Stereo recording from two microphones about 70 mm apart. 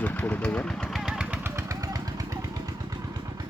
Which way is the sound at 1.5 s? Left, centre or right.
Right.